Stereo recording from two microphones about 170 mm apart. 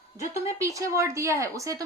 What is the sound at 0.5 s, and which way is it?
Speech, 20° right (ahead or behind).